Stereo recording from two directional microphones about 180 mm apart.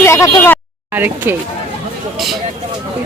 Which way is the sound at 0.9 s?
10° right (ahead or behind).